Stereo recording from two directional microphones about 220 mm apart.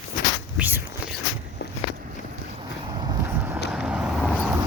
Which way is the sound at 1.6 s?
50° left (ahead or behind).